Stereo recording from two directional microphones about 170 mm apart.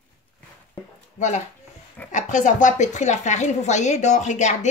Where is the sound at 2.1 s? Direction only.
45° left (ahead or behind).